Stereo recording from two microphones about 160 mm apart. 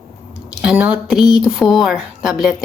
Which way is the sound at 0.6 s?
5° right (ahead or behind).